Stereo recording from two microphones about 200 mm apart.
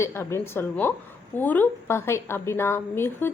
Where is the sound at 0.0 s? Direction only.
10° left (ahead or behind).